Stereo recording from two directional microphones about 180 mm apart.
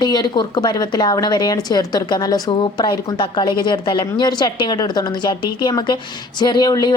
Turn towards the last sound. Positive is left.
turn(degrees=20)  # may be behind; listen again after turning